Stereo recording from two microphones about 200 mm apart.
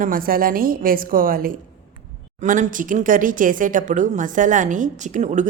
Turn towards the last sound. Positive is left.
turn(degrees=-35)  # may be behind; listen again after turning